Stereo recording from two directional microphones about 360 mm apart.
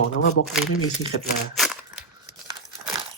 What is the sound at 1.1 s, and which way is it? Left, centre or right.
Speech, left.